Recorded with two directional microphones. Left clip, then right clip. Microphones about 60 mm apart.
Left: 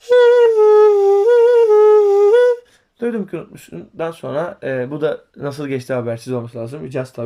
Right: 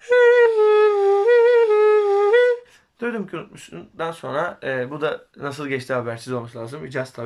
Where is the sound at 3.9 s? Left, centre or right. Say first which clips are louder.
Left 3 dB; centre.